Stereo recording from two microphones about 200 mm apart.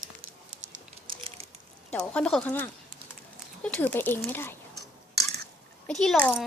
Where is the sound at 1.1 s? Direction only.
25° right (ahead or behind).